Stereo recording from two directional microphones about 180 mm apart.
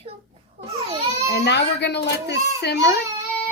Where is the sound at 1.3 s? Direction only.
70° left (ahead or behind).